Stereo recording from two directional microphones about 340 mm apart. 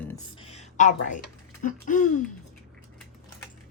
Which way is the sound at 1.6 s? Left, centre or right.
Left.